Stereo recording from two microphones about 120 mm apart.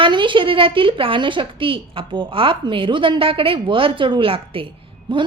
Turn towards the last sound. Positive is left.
turn(degrees=-45)  # may be behind; listen again after turning